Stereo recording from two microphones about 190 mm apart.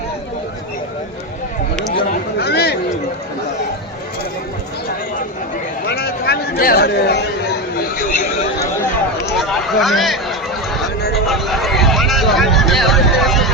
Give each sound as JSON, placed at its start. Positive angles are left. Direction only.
{"t": 2.0, "sound": "chatter", "side_deg": 60}
{"t": 5.9, "sound": "chatter", "side_deg": 60}
{"t": 9.4, "sound": "a sound", "side_deg": 0}